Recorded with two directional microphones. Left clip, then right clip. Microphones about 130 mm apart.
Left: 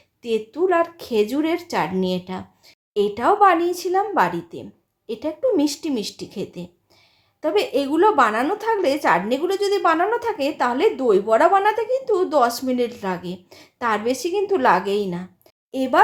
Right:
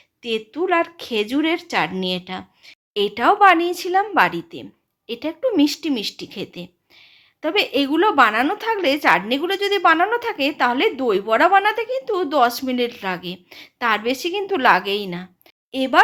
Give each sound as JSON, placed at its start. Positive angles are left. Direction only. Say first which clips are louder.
{"t": 0.2, "sound": "speech", "louder": "left 2 dB", "side_deg": -15}